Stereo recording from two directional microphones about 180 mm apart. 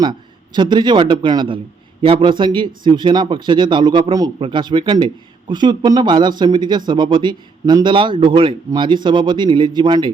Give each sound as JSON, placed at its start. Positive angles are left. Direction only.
{"t": 0.0, "sound": "a man's voice", "side_deg": -25}